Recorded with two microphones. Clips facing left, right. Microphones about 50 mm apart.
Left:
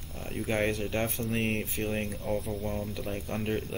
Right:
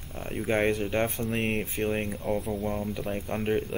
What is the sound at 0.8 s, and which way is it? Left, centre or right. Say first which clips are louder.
Speech: right 3 dB; centre.